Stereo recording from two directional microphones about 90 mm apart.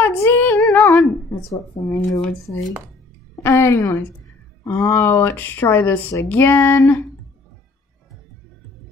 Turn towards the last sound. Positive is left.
turn(degrees=30)  # may be behind; listen again after turning